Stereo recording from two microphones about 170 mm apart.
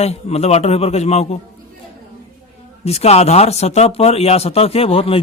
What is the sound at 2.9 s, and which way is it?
A man's voice, 40° left (ahead or behind).